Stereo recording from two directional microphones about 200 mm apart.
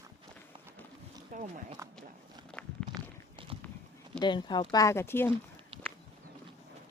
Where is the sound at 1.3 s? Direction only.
40° right (ahead or behind).